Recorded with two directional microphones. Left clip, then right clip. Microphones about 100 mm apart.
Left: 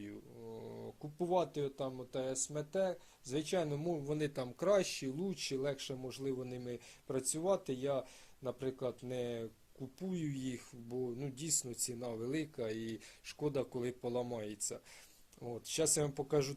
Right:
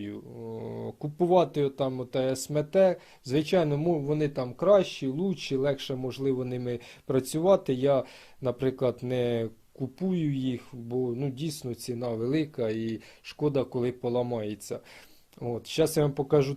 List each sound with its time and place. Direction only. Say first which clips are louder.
0.0 s speech: right 11 dB; 5° right (ahead or behind); by 3.0 s 35° right (ahead or behind)
3.2 s speech: right 11 dB; 20° right (ahead or behind)
3.7 s speech: right 11 dB; centre (ahead or behind)
4.4 s speech: right 11 dB; 25° left (ahead or behind)
5.6 s speech: right 11 dB; centre (ahead or behind); by 9.5 s 25° right (ahead or behind)
10.0 s speech: right 11 dB; 5° right (ahead or behind)